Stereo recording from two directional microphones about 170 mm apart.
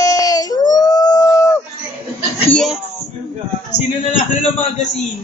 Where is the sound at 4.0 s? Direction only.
40° left (ahead or behind).